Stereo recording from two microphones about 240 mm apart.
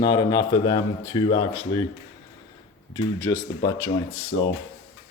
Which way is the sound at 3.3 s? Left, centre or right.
Centre.